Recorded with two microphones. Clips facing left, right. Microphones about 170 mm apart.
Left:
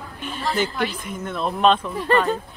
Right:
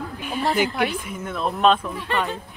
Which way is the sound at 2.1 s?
40° left (ahead or behind).